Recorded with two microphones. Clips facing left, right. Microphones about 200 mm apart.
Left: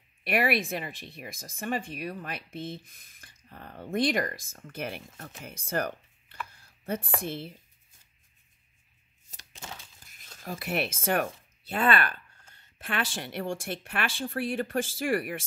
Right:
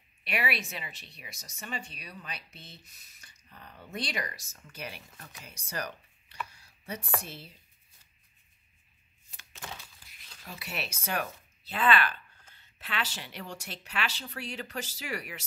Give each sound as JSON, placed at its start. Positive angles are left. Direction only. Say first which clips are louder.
{"t": 0.3, "sound": "speech", "louder": "left 7 dB", "side_deg": 50}
{"t": 9.3, "sound": "a sound", "louder": "left 2 dB", "side_deg": 40}
{"t": 10.0, "sound": "speech", "louder": "left 11 dB", "side_deg": 45}